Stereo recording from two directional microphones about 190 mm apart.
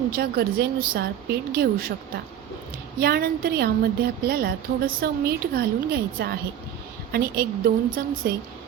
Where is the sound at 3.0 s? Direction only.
55° right (ahead or behind).